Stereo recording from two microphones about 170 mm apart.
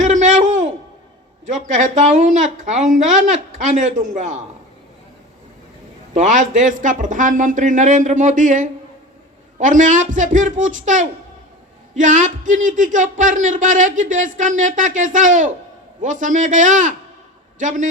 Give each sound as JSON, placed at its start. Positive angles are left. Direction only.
{"t": 0.0, "sound": "a sound", "side_deg": -45}
{"t": 1.6, "sound": "speech", "side_deg": -45}
{"t": 6.1, "sound": "speech", "side_deg": -45}